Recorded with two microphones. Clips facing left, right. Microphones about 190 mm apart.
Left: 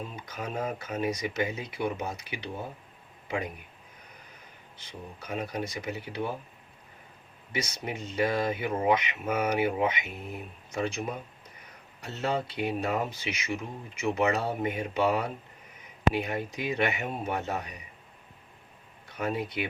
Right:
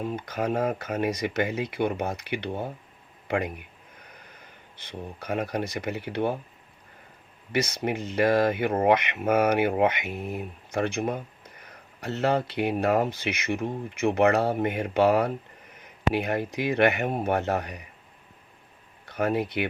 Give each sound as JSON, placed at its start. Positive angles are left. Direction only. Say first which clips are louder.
{"t": 0.3, "sound": "speech", "louder": "right 6 dB", "side_deg": -65}
{"t": 4.9, "sound": "speech", "louder": "right 6 dB", "side_deg": -65}
{"t": 7.5, "sound": "speech", "louder": "right 7 dB", "side_deg": -70}
{"t": 19.0, "sound": "speech", "louder": "right 6 dB", "side_deg": -70}